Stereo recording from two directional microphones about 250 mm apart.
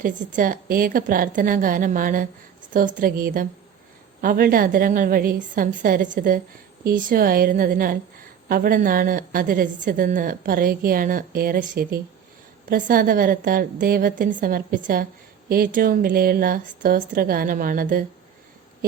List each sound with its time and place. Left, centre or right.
0.0 s a woman's voice: right